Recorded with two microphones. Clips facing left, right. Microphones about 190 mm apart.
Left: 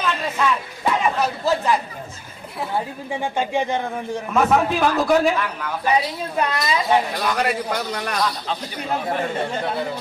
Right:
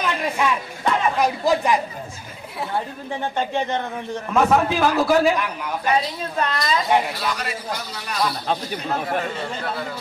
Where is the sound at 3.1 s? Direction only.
10° left (ahead or behind).